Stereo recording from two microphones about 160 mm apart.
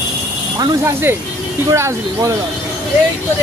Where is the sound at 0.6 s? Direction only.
15° right (ahead or behind).